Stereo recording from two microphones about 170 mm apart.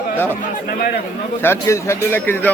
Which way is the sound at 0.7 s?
65° left (ahead or behind).